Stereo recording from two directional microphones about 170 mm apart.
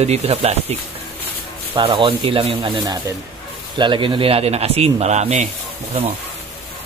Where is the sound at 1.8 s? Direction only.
30° right (ahead or behind).